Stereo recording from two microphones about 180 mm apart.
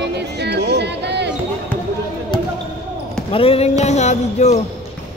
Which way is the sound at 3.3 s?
30° left (ahead or behind).